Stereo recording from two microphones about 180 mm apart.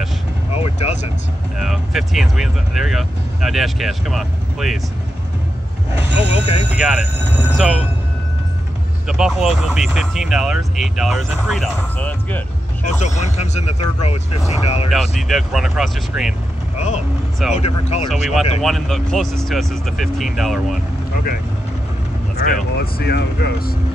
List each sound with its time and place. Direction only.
0.6 s vehicle: 35° left (ahead or behind)
1.6 s speech: centre (ahead or behind)
6.1 s speech: 30° left (ahead or behind)
6.7 s speech: 5° right (ahead or behind)
9.0 s speech: 5° right (ahead or behind)
13.0 s speech: 40° left (ahead or behind)
14.9 s speech: centre (ahead or behind)
16.7 s speech: 40° left (ahead or behind)
18.3 s speech: centre (ahead or behind)
22.8 s speech: 60° left (ahead or behind)